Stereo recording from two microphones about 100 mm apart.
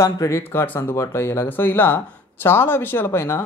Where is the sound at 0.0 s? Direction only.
30° left (ahead or behind).